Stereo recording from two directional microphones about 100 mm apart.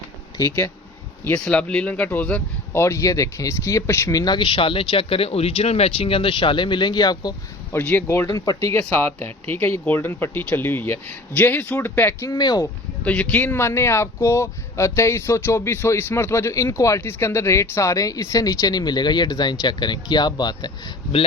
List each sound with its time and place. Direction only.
1.2 s speech: 15° left (ahead or behind)
2.7 s speech: 30° left (ahead or behind)
4.4 s speech: 60° left (ahead or behind); by 7.3 s 45° left (ahead or behind)
7.7 s speech: 20° left (ahead or behind)
8.3 s speech: 40° left (ahead or behind)
8.9 s speech: 20° left (ahead or behind)
12.3 s speech: 45° left (ahead or behind)
13.1 s speech: 10° left (ahead or behind); by 20.9 s 45° left (ahead or behind)